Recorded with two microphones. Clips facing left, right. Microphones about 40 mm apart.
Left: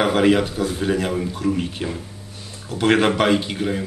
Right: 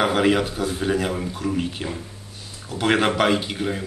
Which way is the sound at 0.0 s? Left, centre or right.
Centre.